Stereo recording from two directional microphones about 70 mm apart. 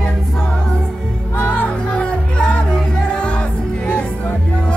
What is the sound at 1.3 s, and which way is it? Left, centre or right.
Music, left.